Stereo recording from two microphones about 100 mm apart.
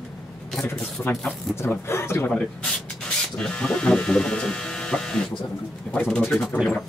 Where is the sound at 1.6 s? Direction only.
25° left (ahead or behind).